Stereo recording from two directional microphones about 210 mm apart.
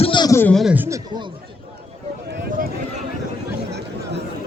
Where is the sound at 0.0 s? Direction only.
20° left (ahead or behind); by 0.9 s 5° right (ahead or behind).